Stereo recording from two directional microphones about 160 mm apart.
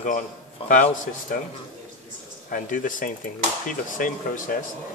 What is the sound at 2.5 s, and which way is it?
Speech, 55° left (ahead or behind).